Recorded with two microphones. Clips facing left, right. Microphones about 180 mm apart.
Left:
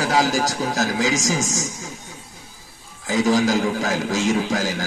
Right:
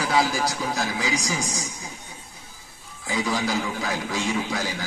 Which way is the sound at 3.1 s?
40° left (ahead or behind).